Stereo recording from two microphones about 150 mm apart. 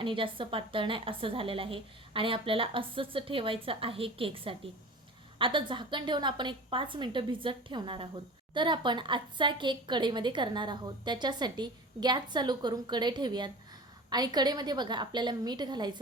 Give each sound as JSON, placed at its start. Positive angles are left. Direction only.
{"t": 0.0, "sound": "a woman's voice", "side_deg": -35}